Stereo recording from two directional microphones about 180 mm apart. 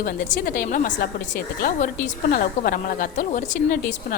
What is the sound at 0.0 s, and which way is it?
Speech, 50° left (ahead or behind).